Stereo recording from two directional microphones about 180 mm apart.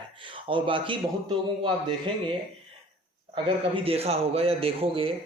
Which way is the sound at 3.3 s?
30° right (ahead or behind).